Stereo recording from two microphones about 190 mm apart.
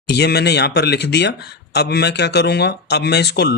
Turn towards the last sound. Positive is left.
turn(degrees=60)  # may be behind; listen again after turning